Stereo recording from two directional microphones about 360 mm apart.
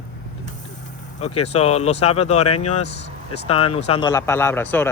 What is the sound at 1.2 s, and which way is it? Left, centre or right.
Speech, centre.